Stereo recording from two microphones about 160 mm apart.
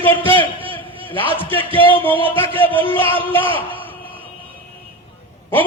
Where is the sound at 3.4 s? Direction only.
35° right (ahead or behind).